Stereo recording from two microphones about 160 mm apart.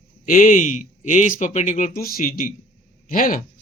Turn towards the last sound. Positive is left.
turn(degrees=55)  # may be behind; listen again after turning